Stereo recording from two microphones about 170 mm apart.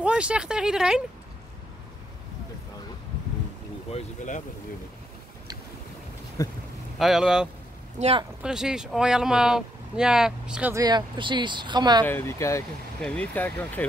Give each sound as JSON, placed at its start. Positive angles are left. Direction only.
{"t": 0.0, "sound": "speech", "side_deg": -5}
{"t": 6.4, "sound": "speech", "side_deg": 15}
{"t": 7.0, "sound": "speech", "side_deg": -5}
{"t": 8.0, "sound": "speech", "side_deg": -35}
{"t": 8.4, "sound": "speech", "side_deg": -5}
{"t": 10.7, "sound": "speech", "side_deg": -25}
{"t": 12.0, "sound": "speech", "side_deg": 10}